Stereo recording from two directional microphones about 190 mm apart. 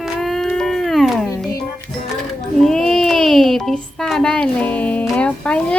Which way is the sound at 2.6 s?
5° left (ahead or behind).